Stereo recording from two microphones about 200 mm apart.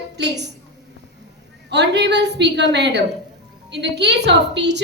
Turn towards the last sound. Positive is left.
turn(degrees=-60)  # may be behind; listen again after turning